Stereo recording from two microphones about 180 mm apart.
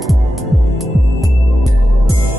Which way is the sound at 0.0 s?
Centre (ahead or behind).